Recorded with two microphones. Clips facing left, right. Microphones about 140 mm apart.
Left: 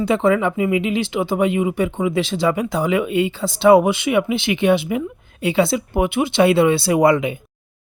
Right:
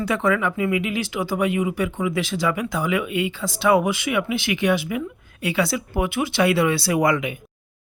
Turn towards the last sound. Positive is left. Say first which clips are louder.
# left 5 dB
turn(degrees=30)  # may be behind; listen again after turning